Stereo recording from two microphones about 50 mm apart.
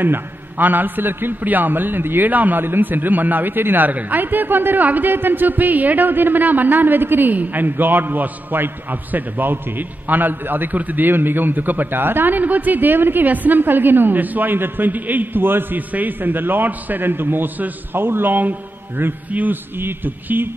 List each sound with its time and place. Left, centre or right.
0.0 s a man's voice: right